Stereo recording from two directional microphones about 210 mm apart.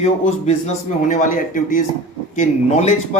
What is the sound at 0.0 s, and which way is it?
A man's voice, 30° left (ahead or behind).